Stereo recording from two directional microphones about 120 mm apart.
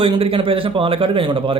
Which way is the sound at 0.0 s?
50° right (ahead or behind).